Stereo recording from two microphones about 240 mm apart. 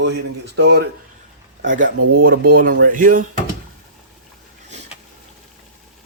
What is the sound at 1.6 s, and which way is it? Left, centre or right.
Speech, right.